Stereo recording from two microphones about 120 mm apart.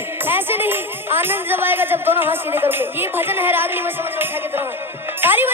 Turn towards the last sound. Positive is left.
turn(degrees=-15)  # may be behind; listen again after turning